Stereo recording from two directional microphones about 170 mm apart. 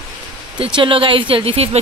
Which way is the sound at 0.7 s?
30° right (ahead or behind).